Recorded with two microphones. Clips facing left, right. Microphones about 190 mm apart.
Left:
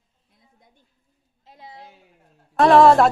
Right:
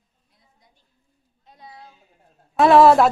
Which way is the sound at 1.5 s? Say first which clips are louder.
Left 2 dB; 25° left (ahead or behind).